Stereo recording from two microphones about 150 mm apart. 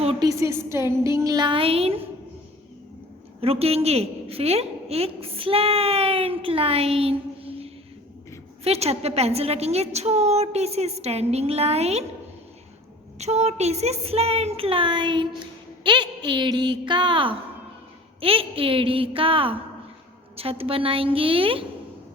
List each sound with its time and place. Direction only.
0.2 s a woman's voice: 20° right (ahead or behind); by 2.0 s 40° right (ahead or behind)
3.4 s a woman's voice: 40° right (ahead or behind)
13.1 s a woman's voice: 45° right (ahead or behind)